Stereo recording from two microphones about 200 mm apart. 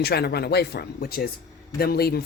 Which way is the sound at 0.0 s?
55° left (ahead or behind).